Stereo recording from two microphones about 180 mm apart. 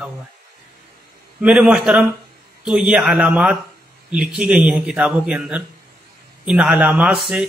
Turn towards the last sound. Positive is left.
turn(degrees=-5)  # may be behind; listen again after turning